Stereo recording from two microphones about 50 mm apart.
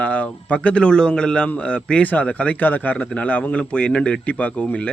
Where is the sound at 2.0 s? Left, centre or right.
Left.